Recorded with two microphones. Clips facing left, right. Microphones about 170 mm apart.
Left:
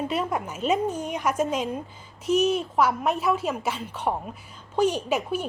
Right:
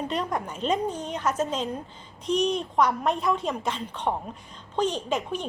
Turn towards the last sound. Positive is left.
turn(degrees=10)  # may be behind; listen again after turning